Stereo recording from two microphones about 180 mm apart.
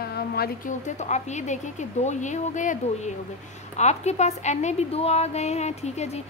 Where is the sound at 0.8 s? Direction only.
40° left (ahead or behind).